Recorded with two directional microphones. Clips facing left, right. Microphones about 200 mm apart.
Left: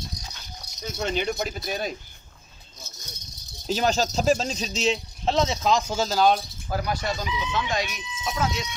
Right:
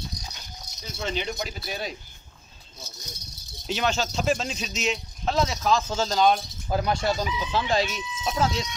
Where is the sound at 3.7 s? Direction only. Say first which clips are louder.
Left 3 dB; 40° left (ahead or behind); by 6.4 s 5° left (ahead or behind).